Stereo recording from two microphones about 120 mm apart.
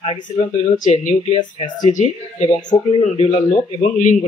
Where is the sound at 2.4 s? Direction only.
55° left (ahead or behind).